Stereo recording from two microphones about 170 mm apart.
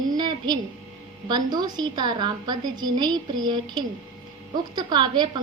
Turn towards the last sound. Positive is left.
turn(degrees=-25)  # may be behind; listen again after turning